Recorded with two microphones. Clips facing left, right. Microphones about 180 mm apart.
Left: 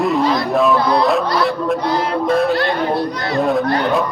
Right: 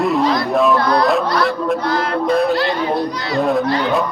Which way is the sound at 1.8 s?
15° left (ahead or behind).